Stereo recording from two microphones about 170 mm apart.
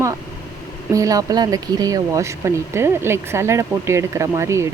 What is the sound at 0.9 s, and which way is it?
Speech, 20° right (ahead or behind).